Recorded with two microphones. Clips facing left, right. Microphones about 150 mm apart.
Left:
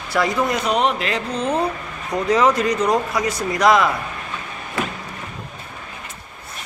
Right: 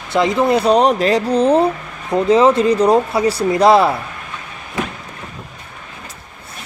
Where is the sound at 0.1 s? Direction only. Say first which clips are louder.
Right 6 dB; 25° right (ahead or behind).